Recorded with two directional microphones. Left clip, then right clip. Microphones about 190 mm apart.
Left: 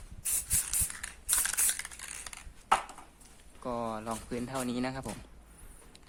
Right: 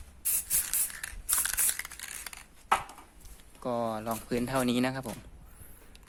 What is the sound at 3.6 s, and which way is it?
Speech, 20° right (ahead or behind).